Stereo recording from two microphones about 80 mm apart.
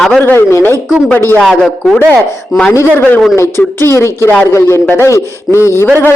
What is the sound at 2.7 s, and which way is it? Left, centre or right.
Speech, left.